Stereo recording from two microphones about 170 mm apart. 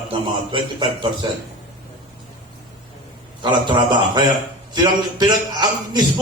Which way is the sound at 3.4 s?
25° right (ahead or behind).